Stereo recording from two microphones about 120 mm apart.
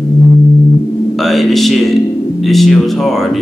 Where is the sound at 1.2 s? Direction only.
Centre (ahead or behind).